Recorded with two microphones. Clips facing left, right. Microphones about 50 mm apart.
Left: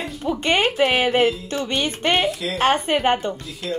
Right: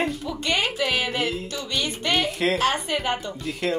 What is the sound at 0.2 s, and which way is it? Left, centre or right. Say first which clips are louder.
Speech: left 5 dB; left.